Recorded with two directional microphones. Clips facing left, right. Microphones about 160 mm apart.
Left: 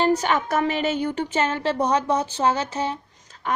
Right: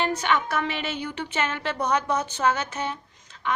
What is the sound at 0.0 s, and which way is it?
A woman's voice, 40° left (ahead or behind).